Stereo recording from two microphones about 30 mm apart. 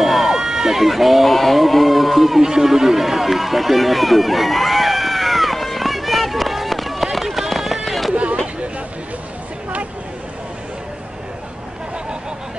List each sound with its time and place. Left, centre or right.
0.0 s speech: centre
2.4 s run: centre
8.1 s a sound: right